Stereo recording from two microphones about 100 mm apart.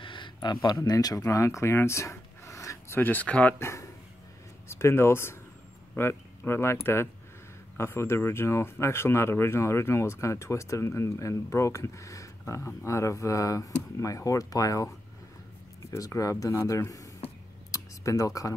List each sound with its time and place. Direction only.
0.0 s speech: 55° left (ahead or behind); by 3.0 s 30° left (ahead or behind)
3.0 s speech: 15° left (ahead or behind)
3.5 s speech: 30° left (ahead or behind)
15.9 s speech: 30° left (ahead or behind)
17.6 s a sound: 35° left (ahead or behind)